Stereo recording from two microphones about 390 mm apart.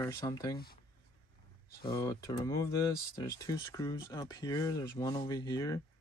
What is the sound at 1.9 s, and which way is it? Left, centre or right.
Speech, centre.